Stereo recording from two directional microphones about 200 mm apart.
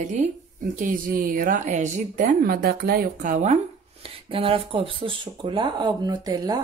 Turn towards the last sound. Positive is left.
turn(degrees=-20)  # may be behind; listen again after turning